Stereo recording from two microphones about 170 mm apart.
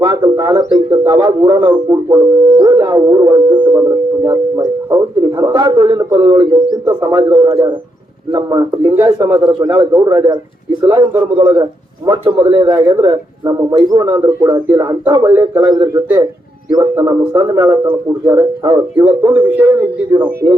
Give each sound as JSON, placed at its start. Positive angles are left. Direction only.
{"t": 0.0, "sound": "a man's voice", "side_deg": -25}